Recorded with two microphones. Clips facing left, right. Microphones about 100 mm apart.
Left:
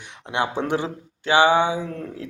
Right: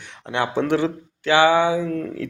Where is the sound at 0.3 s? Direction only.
15° left (ahead or behind).